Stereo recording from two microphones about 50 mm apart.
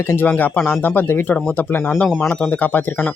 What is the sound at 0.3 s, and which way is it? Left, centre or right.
Speech, left.